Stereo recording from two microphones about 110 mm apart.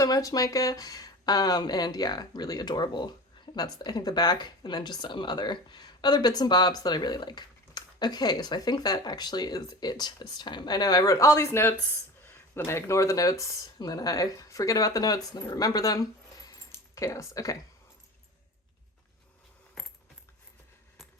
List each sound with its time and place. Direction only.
0.0 s speech: 30° left (ahead or behind)
19.8 s coin: centre (ahead or behind)